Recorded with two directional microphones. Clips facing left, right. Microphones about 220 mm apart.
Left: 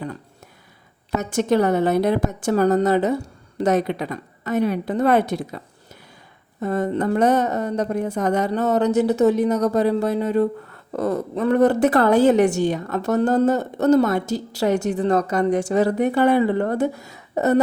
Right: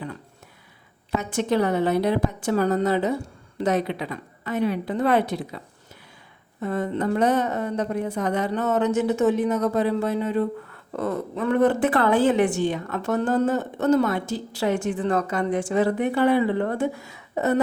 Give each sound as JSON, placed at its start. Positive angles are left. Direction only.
{"t": 1.1, "sound": "a woman's voice", "side_deg": 45}
{"t": 6.6, "sound": "a woman's voice", "side_deg": 40}